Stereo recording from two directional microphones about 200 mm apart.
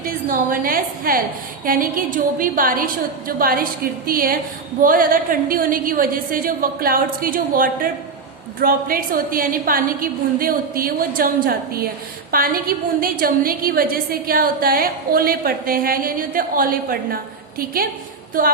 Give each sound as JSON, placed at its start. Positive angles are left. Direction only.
{"t": 0.0, "sound": "a woman's voice", "side_deg": -45}
{"t": 18.4, "sound": "a woman's voice", "side_deg": -45}